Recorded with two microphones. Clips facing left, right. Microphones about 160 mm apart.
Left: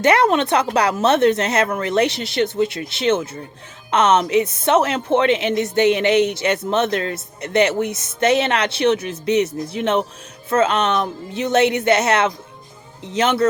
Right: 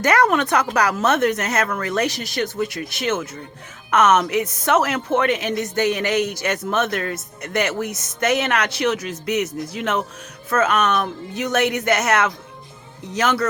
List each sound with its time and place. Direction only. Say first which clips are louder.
0.0 s a woman's voice: left 2 dB; 25° left (ahead or behind)